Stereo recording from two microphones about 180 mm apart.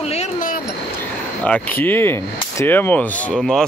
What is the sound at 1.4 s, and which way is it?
Speech, 10° left (ahead or behind).